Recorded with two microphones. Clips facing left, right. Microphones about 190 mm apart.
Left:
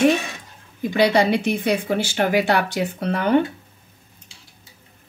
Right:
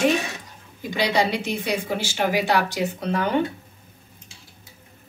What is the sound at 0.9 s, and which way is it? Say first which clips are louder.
Speech: left 5 dB; 55° left (ahead or behind).